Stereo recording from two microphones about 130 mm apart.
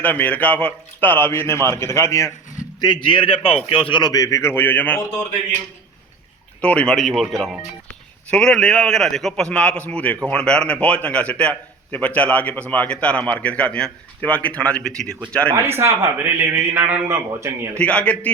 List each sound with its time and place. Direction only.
0.0 s speech: 10° left (ahead or behind)
2.8 s a man's voice: 35° left (ahead or behind); by 5.2 s 15° left (ahead or behind)
6.6 s a man's voice: 10° left (ahead or behind)
15.5 s a man's voice: 20° right (ahead or behind)
17.7 s a man's voice: 10° left (ahead or behind)